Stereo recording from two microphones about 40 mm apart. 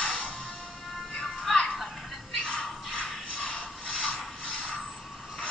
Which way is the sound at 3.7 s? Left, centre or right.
Left.